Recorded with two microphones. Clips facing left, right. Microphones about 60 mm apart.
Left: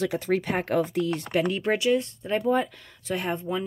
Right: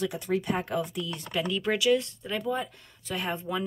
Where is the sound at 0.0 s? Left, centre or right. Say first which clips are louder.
Left 4 dB; left.